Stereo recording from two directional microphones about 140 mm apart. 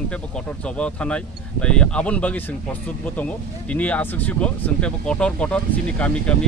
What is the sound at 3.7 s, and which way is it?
Speech, 10° left (ahead or behind).